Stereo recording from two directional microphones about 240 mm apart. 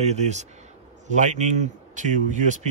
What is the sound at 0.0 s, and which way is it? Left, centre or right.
A man's voice, right.